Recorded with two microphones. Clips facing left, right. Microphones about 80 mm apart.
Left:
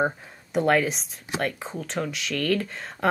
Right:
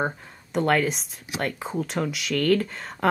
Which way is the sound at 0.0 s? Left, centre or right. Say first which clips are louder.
Left 2 dB; centre.